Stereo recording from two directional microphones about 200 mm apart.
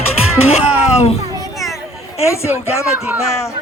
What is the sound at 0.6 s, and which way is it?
Speech, 5° right (ahead or behind).